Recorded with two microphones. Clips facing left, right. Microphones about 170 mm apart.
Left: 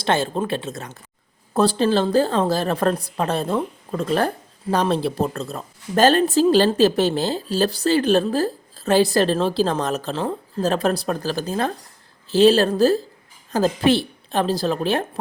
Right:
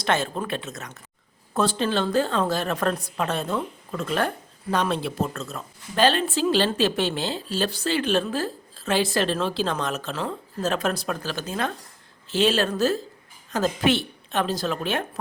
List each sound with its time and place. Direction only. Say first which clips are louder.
0.0 s a woman's voice: left 4 dB; 30° left (ahead or behind)